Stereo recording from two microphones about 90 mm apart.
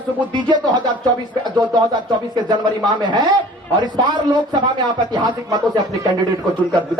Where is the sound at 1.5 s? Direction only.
50° right (ahead or behind).